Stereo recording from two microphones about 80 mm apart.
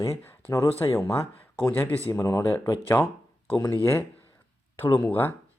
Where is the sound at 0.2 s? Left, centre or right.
Left.